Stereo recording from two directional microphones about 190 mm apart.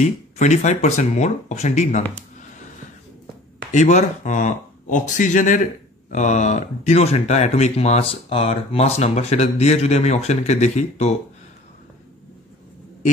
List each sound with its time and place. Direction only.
0.0 s speech: 40° left (ahead or behind)
3.7 s speech: 40° left (ahead or behind)